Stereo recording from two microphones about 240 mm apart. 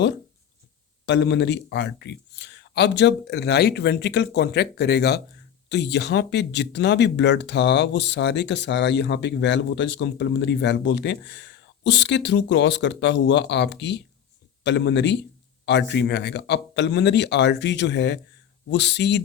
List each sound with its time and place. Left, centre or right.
1.0 s speech: left